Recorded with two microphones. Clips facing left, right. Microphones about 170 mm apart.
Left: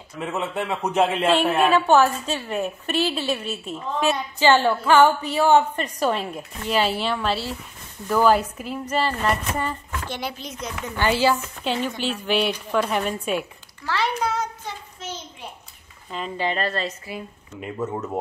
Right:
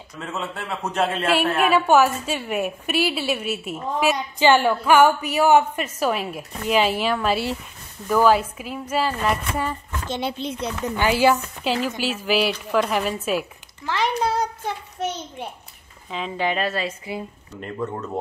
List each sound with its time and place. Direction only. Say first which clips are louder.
0.2 s a man's voice: left 4 dB; 15° left (ahead or behind)
1.8 s a woman's voice: even; 10° right (ahead or behind)
10.0 s speech: right 6 dB; 25° right (ahead or behind)
11.0 s a woman's voice: right 2 dB; 15° right (ahead or behind)
13.8 s a woman's voice: right 1 dB; 15° right (ahead or behind)
14.2 s child singing: right 2 dB; 35° right (ahead or behind)
14.6 s a sound: right 8 dB; 65° right (ahead or behind)
16.1 s a woman's voice: right 2 dB; centre (ahead or behind)
17.6 s a man's voice: left 1 dB; 5° left (ahead or behind)